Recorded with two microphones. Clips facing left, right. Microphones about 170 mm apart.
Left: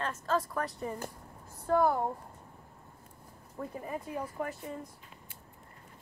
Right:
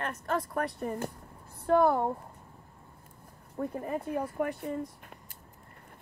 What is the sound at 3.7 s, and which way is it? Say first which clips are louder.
Speech: right 4 dB; 50° right (ahead or behind).